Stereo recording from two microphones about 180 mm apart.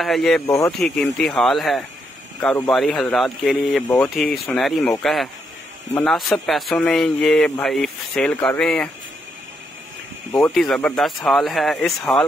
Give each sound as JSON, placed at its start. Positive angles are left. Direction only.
{"t": 0.0, "sound": "speech", "side_deg": 0}
{"t": 3.8, "sound": "speech", "side_deg": 10}
{"t": 10.5, "sound": "speech", "side_deg": 0}